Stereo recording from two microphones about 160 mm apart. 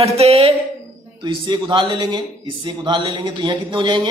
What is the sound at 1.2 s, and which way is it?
Speech, 30° right (ahead or behind).